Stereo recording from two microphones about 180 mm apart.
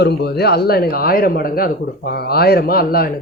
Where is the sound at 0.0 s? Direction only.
65° left (ahead or behind).